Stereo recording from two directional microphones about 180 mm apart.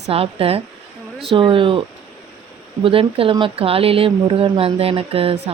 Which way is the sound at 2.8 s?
30° right (ahead or behind).